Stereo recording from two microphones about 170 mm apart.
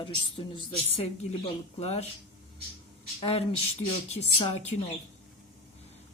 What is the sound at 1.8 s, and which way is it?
Speech, 40° left (ahead or behind).